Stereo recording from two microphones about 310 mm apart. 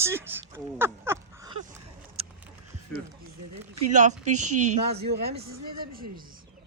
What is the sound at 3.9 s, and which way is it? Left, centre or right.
Speech, right.